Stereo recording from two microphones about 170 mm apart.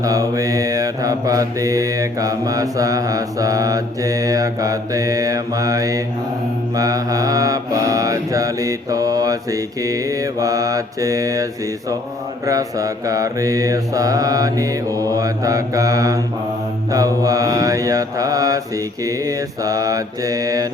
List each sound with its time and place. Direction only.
0.0 s mantra: 20° right (ahead or behind)
12.5 s mantra: 20° right (ahead or behind)